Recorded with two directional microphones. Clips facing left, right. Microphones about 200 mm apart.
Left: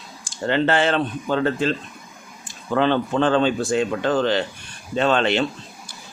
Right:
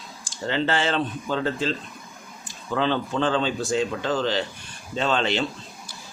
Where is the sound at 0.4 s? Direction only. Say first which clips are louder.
Left 5 dB; 55° left (ahead or behind).